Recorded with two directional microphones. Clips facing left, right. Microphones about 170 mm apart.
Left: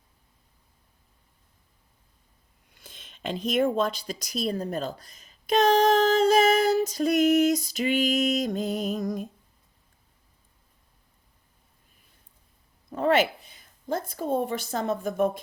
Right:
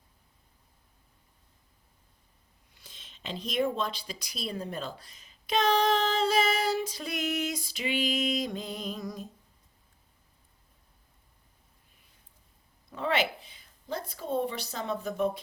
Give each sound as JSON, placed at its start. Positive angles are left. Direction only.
{"t": 2.7, "sound": "speech", "side_deg": 55}
{"t": 12.9, "sound": "a woman's voice", "side_deg": 45}